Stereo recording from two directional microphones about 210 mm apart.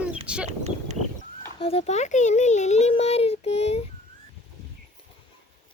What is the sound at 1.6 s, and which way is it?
A child's voice, 30° left (ahead or behind).